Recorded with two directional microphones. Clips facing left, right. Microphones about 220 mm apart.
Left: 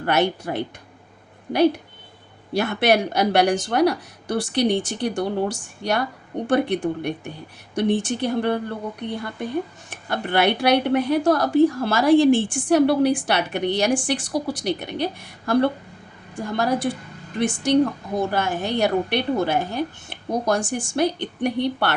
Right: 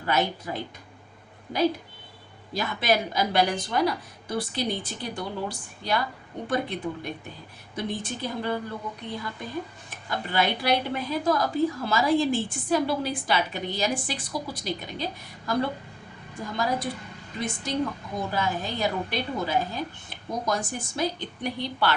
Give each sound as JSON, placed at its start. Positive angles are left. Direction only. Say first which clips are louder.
{"t": 0.0, "sound": "a woman's voice", "louder": "left 6 dB", "side_deg": 75}
{"t": 2.5, "sound": "a woman's voice", "louder": "left 6 dB", "side_deg": 75}
{"t": 6.5, "sound": "a woman's voice", "louder": "left 8 dB", "side_deg": 80}